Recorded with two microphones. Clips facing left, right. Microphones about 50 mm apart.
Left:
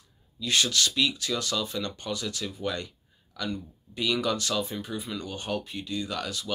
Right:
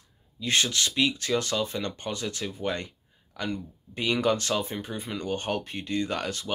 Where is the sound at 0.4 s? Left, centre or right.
Right.